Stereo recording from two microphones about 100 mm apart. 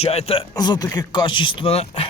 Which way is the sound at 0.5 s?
40° left (ahead or behind).